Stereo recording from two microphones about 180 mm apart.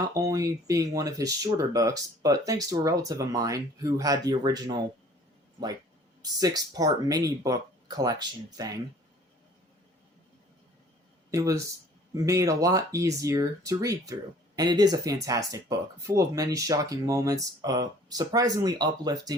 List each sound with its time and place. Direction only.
0.1 s speech: 20° right (ahead or behind)
6.4 s speech: 20° right (ahead or behind)
11.3 s speech: 20° right (ahead or behind)